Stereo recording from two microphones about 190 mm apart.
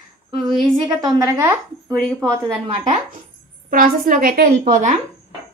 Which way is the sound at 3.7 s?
45° right (ahead or behind).